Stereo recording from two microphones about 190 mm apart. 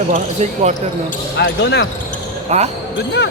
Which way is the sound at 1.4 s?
65° left (ahead or behind).